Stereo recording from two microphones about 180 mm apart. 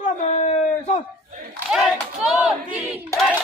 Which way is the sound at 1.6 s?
Centre (ahead or behind).